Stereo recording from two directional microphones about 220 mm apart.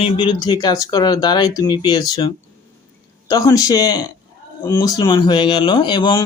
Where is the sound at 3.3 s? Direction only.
15° left (ahead or behind).